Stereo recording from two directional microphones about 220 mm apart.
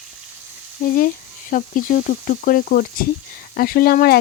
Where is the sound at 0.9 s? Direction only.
40° left (ahead or behind).